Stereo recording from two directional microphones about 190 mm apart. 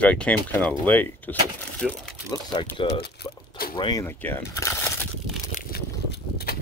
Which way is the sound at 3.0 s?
55° left (ahead or behind).